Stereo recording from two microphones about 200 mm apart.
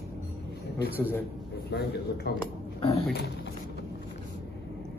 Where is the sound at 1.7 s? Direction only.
55° left (ahead or behind).